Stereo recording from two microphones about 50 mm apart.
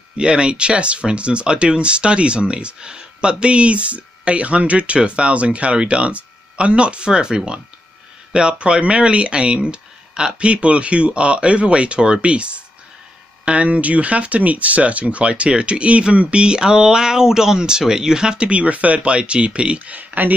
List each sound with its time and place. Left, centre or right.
0.2 s speech: centre